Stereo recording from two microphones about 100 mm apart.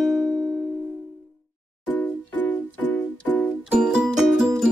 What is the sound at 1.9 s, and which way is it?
Music, 20° left (ahead or behind).